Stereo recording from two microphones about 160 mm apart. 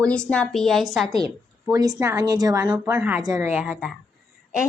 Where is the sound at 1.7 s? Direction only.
20° right (ahead or behind).